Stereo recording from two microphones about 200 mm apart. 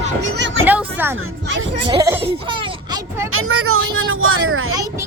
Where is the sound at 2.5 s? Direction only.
25° right (ahead or behind).